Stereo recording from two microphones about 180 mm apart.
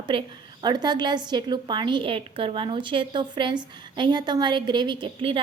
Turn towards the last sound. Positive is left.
turn(degrees=-30)  # may be behind; listen again after turning